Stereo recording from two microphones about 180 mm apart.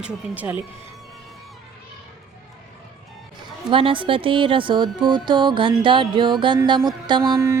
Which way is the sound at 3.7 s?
30° right (ahead or behind).